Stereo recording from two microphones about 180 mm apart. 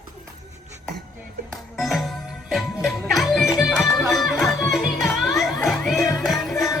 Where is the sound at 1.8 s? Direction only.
Centre (ahead or behind).